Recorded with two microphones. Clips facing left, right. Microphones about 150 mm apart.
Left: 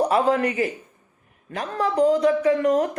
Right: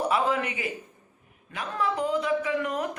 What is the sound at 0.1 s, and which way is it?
Speech, 40° left (ahead or behind).